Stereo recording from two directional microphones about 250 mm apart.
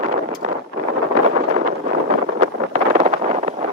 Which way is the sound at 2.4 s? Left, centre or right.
Right.